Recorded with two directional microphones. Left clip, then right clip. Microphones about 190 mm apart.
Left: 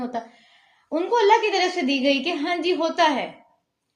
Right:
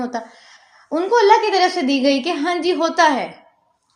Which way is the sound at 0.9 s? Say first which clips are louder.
Right 5 dB; 35° right (ahead or behind).